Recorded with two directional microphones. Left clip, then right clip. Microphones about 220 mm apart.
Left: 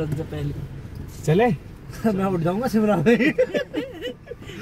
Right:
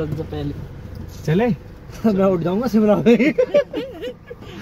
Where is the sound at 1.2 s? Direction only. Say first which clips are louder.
Left 1 dB; 35° left (ahead or behind).